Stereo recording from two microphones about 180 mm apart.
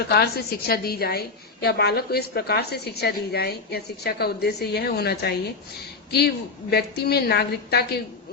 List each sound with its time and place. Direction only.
0.1 s a woman's voice: 60° left (ahead or behind)